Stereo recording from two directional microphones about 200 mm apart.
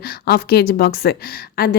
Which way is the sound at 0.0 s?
50° left (ahead or behind).